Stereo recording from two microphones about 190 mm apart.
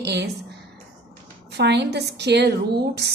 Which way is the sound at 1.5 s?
65° right (ahead or behind).